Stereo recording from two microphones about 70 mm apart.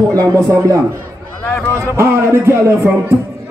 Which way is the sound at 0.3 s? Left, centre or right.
Right.